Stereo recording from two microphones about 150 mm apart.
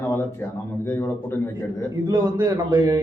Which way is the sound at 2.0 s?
25° right (ahead or behind).